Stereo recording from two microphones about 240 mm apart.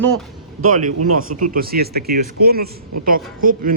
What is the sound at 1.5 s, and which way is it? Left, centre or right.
Speech, right.